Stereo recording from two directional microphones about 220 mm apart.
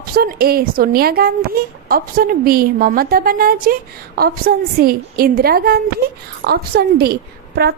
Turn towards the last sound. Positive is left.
turn(degrees=-45)  # may be behind; listen again after turning